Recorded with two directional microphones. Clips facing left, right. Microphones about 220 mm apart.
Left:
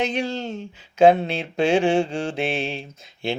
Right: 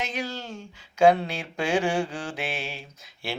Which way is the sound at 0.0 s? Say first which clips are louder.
Left 8 dB; 30° left (ahead or behind).